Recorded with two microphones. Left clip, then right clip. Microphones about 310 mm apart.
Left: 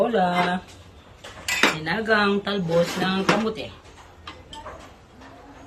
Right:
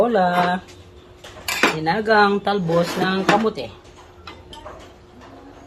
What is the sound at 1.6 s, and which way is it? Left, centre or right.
Speech, centre.